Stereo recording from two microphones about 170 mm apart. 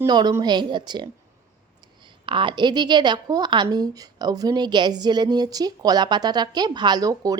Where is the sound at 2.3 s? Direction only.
30° right (ahead or behind).